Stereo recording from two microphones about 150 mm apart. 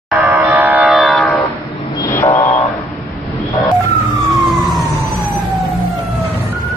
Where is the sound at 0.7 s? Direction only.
Centre (ahead or behind).